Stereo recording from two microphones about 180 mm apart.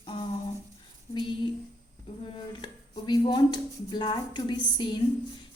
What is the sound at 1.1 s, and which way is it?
Speech, 25° left (ahead or behind).